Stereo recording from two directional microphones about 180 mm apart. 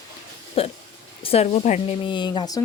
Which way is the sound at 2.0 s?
25° left (ahead or behind).